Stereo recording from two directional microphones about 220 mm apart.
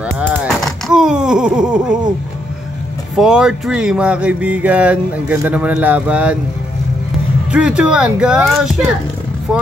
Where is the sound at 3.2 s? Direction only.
5° right (ahead or behind).